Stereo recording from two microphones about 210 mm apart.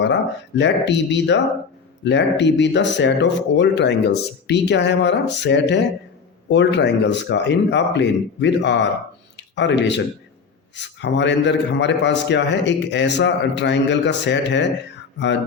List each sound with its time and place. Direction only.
0.0 s a man's voice: 55° left (ahead or behind)